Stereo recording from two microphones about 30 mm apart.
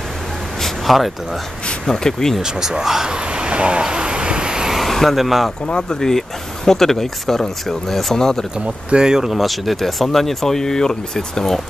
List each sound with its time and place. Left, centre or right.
0.6 s a sound: centre
0.9 s speech: centre
1.9 s speech: centre
2.4 s speech: centre
3.1 s speech: right
3.8 s vehicle: right
5.1 s speech: centre
5.8 s speech: centre
8.5 s speech: right
9.0 s speech: right
9.3 s speech: centre; by 11.5 s left